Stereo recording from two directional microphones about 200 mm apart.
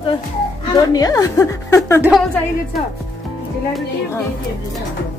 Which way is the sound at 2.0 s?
5° right (ahead or behind).